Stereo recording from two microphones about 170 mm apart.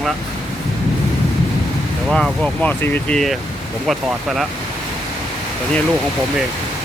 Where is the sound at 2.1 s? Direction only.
5° left (ahead or behind).